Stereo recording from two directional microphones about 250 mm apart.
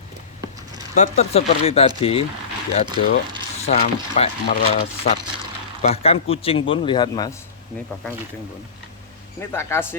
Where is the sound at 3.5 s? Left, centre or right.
Left.